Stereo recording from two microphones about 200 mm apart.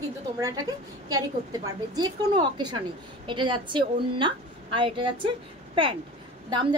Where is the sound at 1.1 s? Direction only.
20° right (ahead or behind).